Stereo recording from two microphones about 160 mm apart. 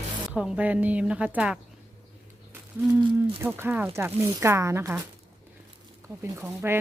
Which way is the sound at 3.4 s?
15° right (ahead or behind).